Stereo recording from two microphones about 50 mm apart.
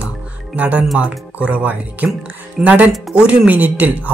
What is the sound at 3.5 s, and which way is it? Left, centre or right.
Speech, right.